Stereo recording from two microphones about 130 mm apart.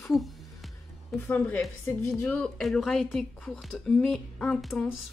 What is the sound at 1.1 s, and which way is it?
Speech, 15° left (ahead or behind).